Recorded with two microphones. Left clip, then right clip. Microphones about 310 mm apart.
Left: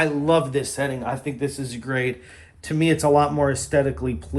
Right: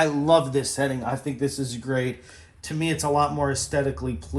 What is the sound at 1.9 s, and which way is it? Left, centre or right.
Speech, centre.